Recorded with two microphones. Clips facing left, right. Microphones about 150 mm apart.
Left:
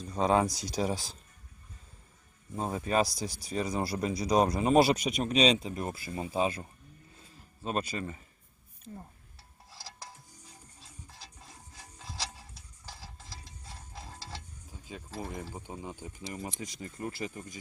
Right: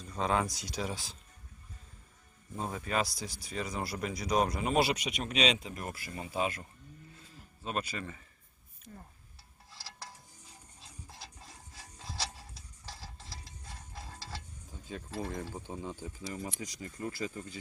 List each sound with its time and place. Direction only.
0.1 s speech: 35° left (ahead or behind)
2.6 s speech: 30° left (ahead or behind)
14.7 s a sound: 10° left (ahead or behind)
15.2 s speech: 10° left (ahead or behind)